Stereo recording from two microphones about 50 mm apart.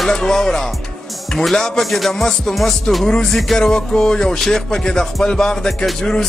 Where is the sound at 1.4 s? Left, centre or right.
Centre.